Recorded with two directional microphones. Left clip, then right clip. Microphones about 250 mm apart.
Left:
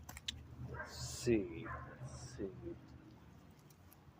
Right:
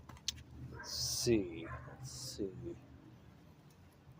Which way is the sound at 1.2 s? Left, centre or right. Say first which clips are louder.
Even; centre.